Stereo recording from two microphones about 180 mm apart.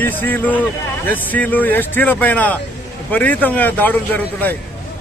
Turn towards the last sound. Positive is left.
turn(degrees=10)  # may be behind; listen again after turning